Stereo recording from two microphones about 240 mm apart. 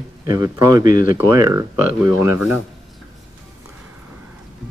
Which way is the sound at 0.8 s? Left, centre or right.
Left.